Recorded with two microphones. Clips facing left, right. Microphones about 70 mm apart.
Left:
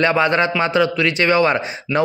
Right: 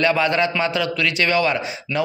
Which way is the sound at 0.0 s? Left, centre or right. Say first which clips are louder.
Left 2 dB; left.